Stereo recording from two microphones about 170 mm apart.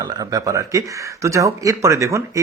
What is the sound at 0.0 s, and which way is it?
Speech, 20° right (ahead or behind).